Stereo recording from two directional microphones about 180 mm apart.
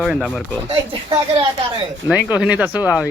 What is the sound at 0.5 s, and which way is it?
Speech, 30° right (ahead or behind).